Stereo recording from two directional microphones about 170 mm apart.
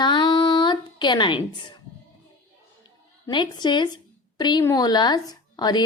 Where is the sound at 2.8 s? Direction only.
25° left (ahead or behind).